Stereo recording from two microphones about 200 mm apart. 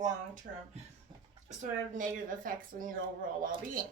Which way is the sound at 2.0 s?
40° right (ahead or behind).